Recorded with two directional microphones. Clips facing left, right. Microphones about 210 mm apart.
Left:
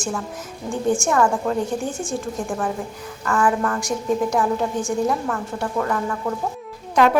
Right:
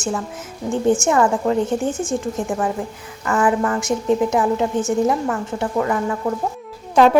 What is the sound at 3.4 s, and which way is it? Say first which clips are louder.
Speech: right 3 dB; 10° right (ahead or behind).